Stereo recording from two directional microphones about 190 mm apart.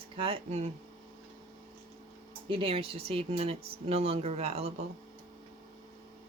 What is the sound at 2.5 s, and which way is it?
Speech, 30° right (ahead or behind).